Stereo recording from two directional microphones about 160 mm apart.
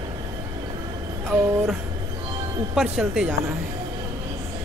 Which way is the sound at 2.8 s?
5° right (ahead or behind).